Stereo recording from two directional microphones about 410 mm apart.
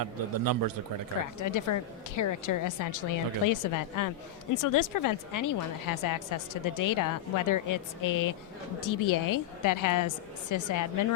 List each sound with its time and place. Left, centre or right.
0.0 s a man's voice: right
1.4 s a woman's voice: left